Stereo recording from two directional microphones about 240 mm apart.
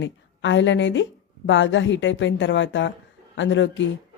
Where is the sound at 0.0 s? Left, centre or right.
Left.